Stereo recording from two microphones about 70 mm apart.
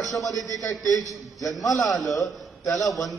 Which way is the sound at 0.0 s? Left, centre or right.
Centre.